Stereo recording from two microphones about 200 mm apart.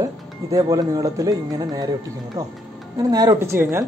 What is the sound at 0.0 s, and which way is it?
Speech, 15° right (ahead or behind).